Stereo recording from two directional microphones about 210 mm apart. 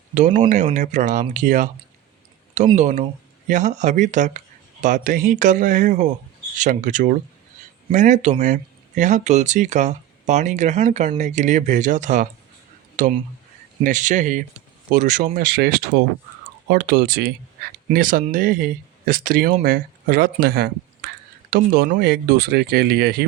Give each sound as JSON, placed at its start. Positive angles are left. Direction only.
{"t": 0.1, "sound": "speech", "side_deg": -35}
{"t": 2.7, "sound": "speech", "side_deg": -35}
{"t": 17.8, "sound": "speech", "side_deg": -40}